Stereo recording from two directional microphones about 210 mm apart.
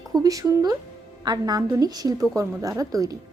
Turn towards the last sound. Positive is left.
turn(degrees=-15)  # may be behind; listen again after turning